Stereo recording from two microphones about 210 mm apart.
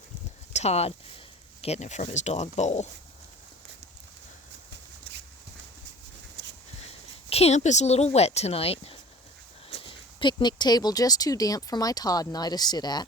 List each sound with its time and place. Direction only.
0.5 s speech: 30° left (ahead or behind)
5.1 s horse: 55° right (ahead or behind)
7.3 s speech: 30° left (ahead or behind)